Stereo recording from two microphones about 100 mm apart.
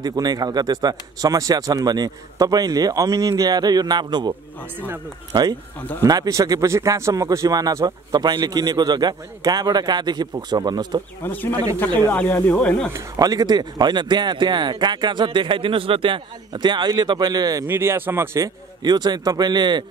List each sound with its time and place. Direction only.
0.0 s speech: 40° right (ahead or behind)
4.7 s speech: 20° right (ahead or behind)
5.3 s speech: 45° right (ahead or behind)
5.8 s speech: 15° left (ahead or behind)
6.0 s speech: 35° right (ahead or behind)
11.2 s speech: 20° left (ahead or behind)
12.9 s speech: 35° right (ahead or behind)
17.6 s speech: 25° right (ahead or behind)
18.8 s speech: 45° right (ahead or behind)